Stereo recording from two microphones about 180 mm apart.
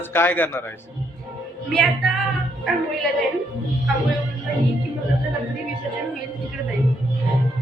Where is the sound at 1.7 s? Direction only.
Centre (ahead or behind).